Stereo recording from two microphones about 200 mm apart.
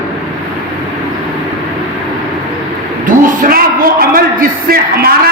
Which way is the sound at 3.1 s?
40° right (ahead or behind).